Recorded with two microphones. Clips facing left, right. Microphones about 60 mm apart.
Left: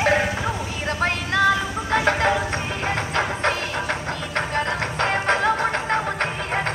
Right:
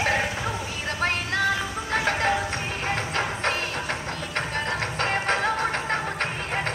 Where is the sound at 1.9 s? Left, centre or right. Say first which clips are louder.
Left 4 dB; left.